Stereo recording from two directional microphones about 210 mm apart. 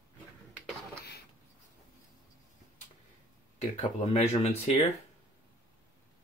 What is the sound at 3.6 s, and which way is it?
Speech, 30° left (ahead or behind).